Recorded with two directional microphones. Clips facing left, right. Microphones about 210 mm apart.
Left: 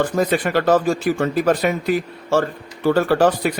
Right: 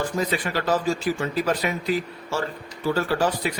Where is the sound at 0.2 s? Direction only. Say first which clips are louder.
Left 8 dB; 55° left (ahead or behind).